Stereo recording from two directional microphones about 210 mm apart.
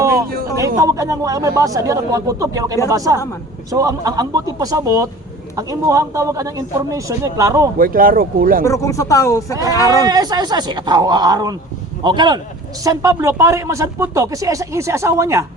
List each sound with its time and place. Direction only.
0.8 s speech: 15° right (ahead or behind)
7.8 s speech: 40° right (ahead or behind)
8.6 s speech: 15° left (ahead or behind)
10.1 s speech: 20° right (ahead or behind)